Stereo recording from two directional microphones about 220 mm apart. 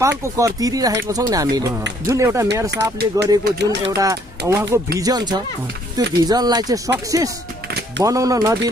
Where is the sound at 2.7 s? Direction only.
50° right (ahead or behind).